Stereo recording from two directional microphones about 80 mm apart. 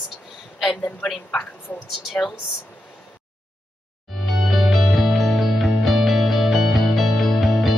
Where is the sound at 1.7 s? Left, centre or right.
Left.